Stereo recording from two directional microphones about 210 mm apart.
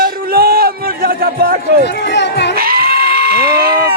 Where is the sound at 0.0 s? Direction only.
45° right (ahead or behind).